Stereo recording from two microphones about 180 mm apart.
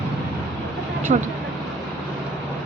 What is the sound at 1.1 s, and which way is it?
Speech, 45° right (ahead or behind).